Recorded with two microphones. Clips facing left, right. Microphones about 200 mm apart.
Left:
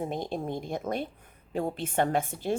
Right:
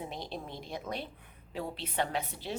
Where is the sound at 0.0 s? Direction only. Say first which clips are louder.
Left 8 dB; 50° left (ahead or behind).